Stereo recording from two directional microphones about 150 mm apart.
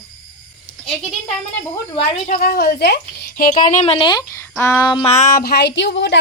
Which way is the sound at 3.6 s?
50° left (ahead or behind).